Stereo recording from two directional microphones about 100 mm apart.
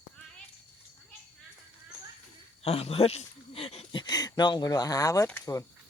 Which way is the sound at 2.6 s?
85° left.